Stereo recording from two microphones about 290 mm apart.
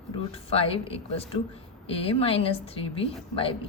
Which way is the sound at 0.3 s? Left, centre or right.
Centre.